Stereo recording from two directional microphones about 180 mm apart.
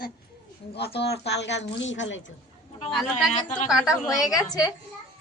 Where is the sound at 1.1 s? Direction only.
70° left (ahead or behind).